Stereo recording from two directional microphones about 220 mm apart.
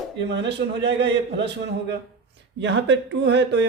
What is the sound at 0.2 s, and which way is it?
A man's voice, 50° right (ahead or behind).